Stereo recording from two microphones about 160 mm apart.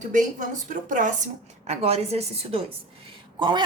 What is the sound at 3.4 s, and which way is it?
Speech, 30° right (ahead or behind).